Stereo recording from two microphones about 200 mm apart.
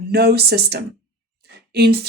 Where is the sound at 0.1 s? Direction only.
55° right (ahead or behind).